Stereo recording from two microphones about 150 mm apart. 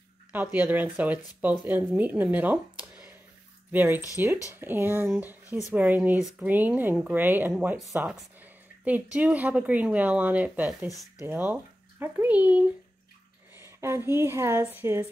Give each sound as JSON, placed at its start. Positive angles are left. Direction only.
{"t": 0.3, "sound": "speech", "side_deg": -10}